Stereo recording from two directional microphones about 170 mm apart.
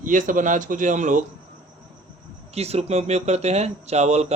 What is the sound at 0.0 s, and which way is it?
Speech, 50° right (ahead or behind).